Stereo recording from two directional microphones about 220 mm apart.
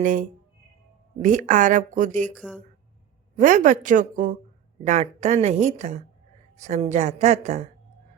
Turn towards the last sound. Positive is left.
turn(degrees=-35)  # may be behind; listen again after turning